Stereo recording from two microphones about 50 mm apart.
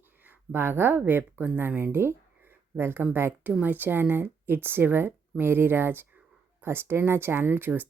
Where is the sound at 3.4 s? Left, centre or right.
Right.